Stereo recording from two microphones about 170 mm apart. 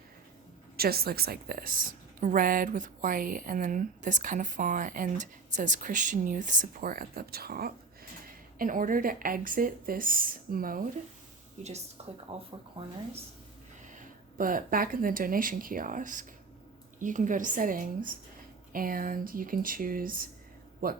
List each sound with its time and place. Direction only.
0.8 s a woman's voice: 65° right (ahead or behind)
8.5 s speech: 55° right (ahead or behind)
11.6 s a woman's voice: 45° right (ahead or behind)
14.0 s a woman's voice: 55° right (ahead or behind)